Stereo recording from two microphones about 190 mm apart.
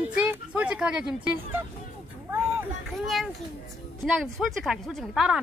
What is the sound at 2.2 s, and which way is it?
Vehicle, 10° right (ahead or behind).